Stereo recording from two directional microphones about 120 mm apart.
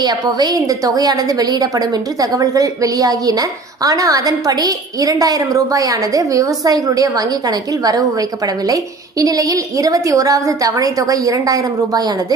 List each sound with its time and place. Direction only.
0.0 s a woman's voice: 35° right (ahead or behind)